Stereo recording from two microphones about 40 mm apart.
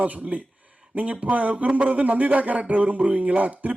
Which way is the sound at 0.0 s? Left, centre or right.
Right.